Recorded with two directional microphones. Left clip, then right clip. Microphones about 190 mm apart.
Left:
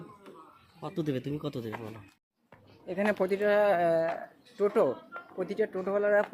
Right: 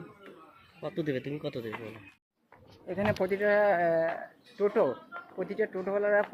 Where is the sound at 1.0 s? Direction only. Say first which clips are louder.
Even; 75° left (ahead or behind); by 1.6 s 90° left.